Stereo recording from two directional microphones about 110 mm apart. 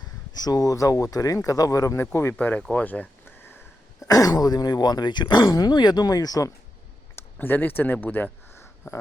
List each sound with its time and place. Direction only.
0.3 s speech: 35° left (ahead or behind)
2.3 s speech: 15° left (ahead or behind)
2.6 s a sound: 15° left (ahead or behind)
4.0 s speech: 35° left (ahead or behind)
7.2 s speech: 15° left (ahead or behind)
8.0 s a sound: 15° left (ahead or behind)